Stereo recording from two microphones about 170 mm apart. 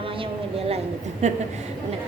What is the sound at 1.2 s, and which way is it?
Speech, 45° right (ahead or behind).